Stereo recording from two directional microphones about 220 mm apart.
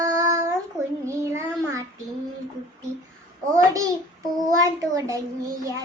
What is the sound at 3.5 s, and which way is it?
Speech, 15° right (ahead or behind).